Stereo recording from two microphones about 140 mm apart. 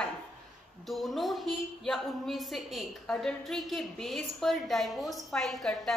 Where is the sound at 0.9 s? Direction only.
Centre (ahead or behind).